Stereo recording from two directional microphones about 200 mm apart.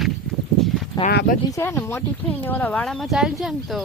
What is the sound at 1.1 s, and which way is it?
Speech, 45° left (ahead or behind).